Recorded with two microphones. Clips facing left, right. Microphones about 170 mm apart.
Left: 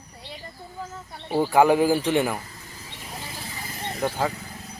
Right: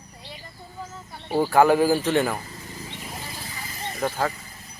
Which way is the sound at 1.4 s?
15° left (ahead or behind).